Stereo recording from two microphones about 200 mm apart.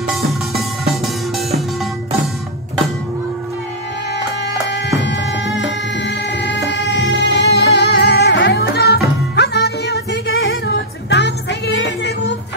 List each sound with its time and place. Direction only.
0.3 s music: centre (ahead or behind)
4.6 s music: 65° left (ahead or behind)